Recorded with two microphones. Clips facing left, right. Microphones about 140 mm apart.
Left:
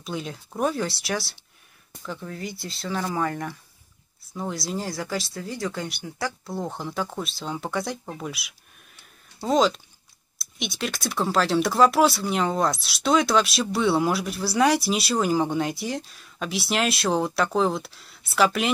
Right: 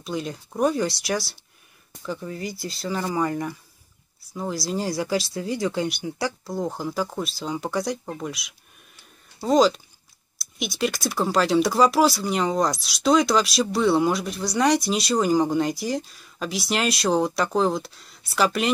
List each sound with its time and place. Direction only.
0.0 s speech: centre (ahead or behind)
6.4 s speech: centre (ahead or behind)